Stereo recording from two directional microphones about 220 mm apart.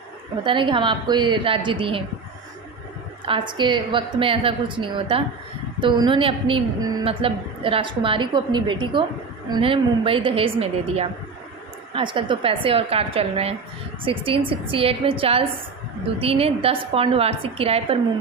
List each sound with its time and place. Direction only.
0.4 s a woman's voice: 20° right (ahead or behind)
3.2 s a woman's voice: 20° right (ahead or behind)